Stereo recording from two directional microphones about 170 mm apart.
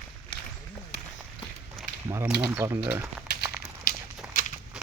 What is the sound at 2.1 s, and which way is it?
Speech, 15° right (ahead or behind).